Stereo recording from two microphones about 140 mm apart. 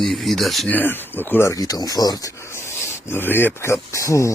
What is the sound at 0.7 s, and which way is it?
Speech, 15° left (ahead or behind).